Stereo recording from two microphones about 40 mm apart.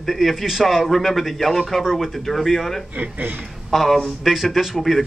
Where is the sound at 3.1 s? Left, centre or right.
Right.